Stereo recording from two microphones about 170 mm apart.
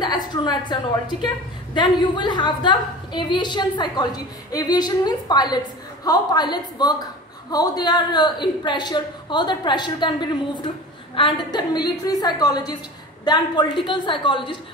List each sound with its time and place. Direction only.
0.0 s a woman's voice: 25° left (ahead or behind)
11.1 s a woman's voice: 25° left (ahead or behind)